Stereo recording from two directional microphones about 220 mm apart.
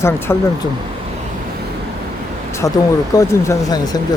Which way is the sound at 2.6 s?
15° left (ahead or behind).